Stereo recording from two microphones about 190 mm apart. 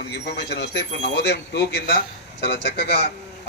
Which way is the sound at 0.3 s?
65° left (ahead or behind).